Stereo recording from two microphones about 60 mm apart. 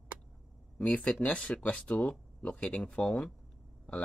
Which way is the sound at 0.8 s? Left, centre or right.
Left.